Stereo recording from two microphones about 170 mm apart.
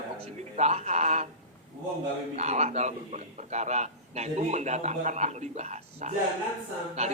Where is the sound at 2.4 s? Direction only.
40° right (ahead or behind).